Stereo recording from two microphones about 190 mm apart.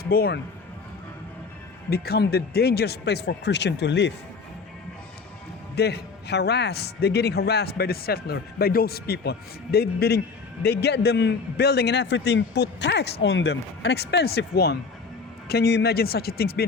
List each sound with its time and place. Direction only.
0.1 s speech: 55° left (ahead or behind)
1.9 s a man's voice: 55° left (ahead or behind)
5.7 s a man's voice: 60° left (ahead or behind)